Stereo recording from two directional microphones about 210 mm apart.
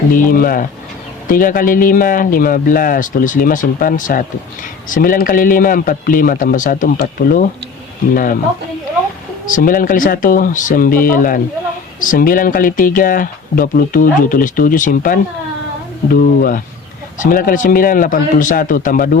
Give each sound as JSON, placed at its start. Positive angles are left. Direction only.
{"t": 0.2, "sound": "speech", "side_deg": 45}
{"t": 9.6, "sound": "speech", "side_deg": 40}